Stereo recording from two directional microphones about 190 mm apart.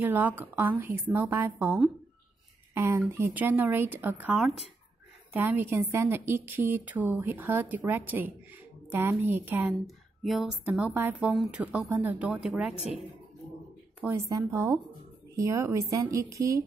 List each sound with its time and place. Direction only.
0.0 s a woman's voice: 10° right (ahead or behind)
14.0 s a woman's voice: 15° right (ahead or behind)